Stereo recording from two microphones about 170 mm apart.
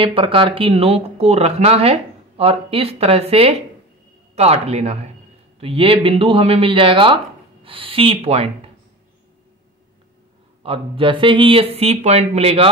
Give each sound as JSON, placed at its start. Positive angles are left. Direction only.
{"t": 0.0, "sound": "speech", "side_deg": -30}
{"t": 10.6, "sound": "speech", "side_deg": -30}